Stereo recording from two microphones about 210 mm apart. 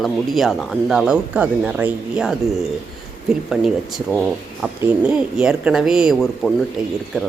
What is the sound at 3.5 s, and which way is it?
Speech, centre (ahead or behind).